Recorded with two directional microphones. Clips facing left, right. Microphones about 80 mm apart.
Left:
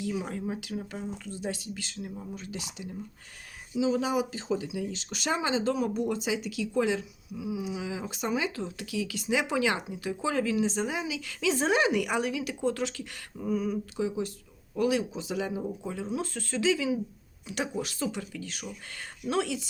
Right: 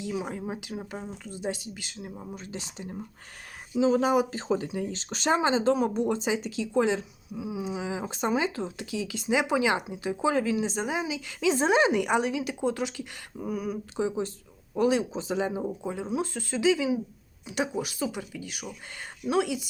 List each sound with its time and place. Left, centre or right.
0.0 s speech: centre
13.9 s speech: right; by 19.6 s centre